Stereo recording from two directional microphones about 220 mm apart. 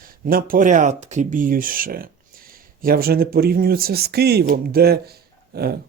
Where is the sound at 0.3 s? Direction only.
40° right (ahead or behind).